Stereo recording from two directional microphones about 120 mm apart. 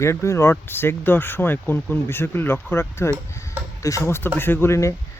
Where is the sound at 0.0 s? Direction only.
25° left (ahead or behind).